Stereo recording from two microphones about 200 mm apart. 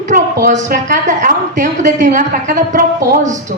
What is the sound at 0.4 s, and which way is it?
A woman's voice, 40° right (ahead or behind).